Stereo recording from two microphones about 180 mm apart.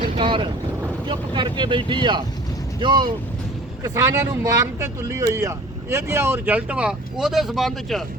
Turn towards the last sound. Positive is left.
turn(degrees=0)  # may be behind; listen again after turning